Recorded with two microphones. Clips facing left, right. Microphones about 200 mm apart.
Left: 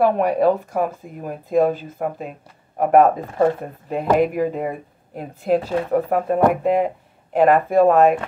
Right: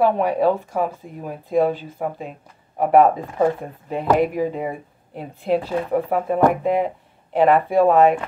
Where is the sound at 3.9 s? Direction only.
45° left (ahead or behind).